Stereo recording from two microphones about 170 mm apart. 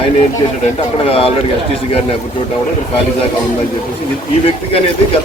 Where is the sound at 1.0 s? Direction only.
35° left (ahead or behind).